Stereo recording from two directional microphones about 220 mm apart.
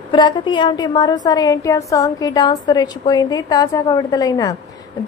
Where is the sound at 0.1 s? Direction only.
20° left (ahead or behind).